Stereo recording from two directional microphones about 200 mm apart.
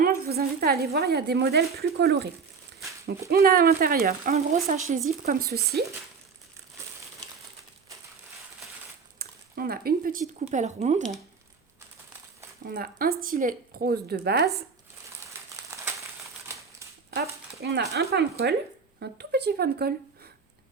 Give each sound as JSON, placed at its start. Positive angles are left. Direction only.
{"t": 0.0, "sound": "a woman's voice", "side_deg": -50}
{"t": 5.5, "sound": "speech", "side_deg": -50}
{"t": 9.1, "sound": "a sound", "side_deg": -50}
{"t": 10.4, "sound": "speech", "side_deg": -35}
{"t": 12.7, "sound": "speech", "side_deg": -50}
{"t": 17.2, "sound": "speech", "side_deg": -55}